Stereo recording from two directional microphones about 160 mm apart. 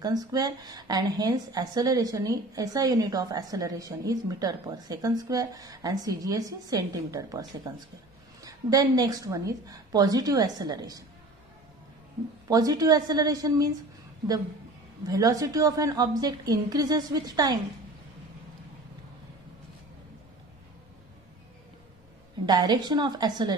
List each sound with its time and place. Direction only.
0.0 s a woman's voice: 25° right (ahead or behind)
12.4 s a woman's voice: 25° right (ahead or behind)
15.0 s a woman's voice: 20° right (ahead or behind)
22.5 s a woman's voice: 25° right (ahead or behind)